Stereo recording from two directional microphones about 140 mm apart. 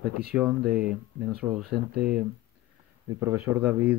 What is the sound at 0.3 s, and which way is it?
Speech, 5° right (ahead or behind).